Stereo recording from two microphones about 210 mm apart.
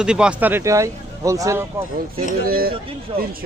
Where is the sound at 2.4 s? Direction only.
45° right (ahead or behind).